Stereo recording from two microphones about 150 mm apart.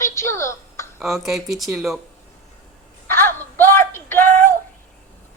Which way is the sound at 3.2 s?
15° left (ahead or behind).